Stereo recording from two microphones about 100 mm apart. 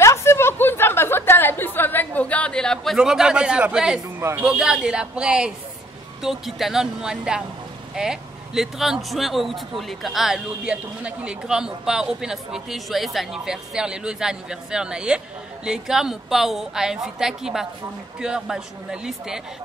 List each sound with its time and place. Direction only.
0.0 s a sound: 30° left (ahead or behind); by 3.0 s 5° left (ahead or behind)
3.0 s a woman's voice: 5° right (ahead or behind)
4.2 s a man's voice: 25° right (ahead or behind)
4.5 s a woman's voice: 5° right (ahead or behind)